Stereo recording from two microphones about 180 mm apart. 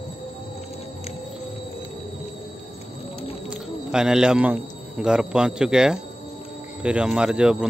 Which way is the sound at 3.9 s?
5° right (ahead or behind).